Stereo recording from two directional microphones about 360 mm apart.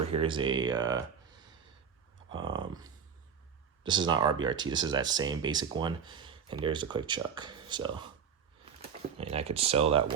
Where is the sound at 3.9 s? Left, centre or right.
Centre.